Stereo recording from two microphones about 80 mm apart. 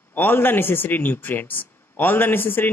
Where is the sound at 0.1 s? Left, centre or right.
Left.